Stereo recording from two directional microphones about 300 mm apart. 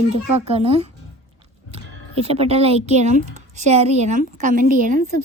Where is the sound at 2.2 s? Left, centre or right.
Centre.